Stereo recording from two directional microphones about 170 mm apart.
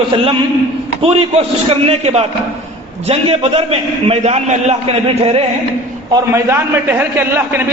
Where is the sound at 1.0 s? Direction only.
35° right (ahead or behind).